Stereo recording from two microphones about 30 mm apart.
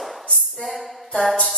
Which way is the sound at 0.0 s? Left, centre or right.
Centre.